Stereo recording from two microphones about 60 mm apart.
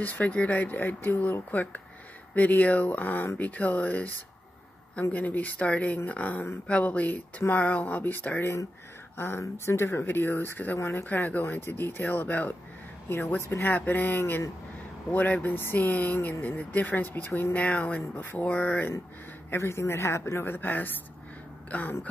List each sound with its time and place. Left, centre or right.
0.0 s speech: left
5.1 s speech: left
9.1 s speech: left
11.1 s speech: left
13.4 s speech: left
13.7 s speech: left
15.0 s speech: left
17.3 s speech: left
17.6 s speech: left
19.5 s speech: left
20.4 s speech: left